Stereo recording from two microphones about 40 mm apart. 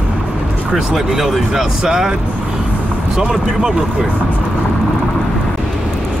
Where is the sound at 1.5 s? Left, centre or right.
Centre.